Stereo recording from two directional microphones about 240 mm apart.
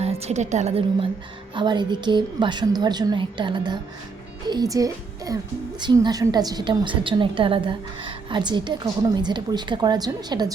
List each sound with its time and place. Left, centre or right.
0.0 s a woman's voice: right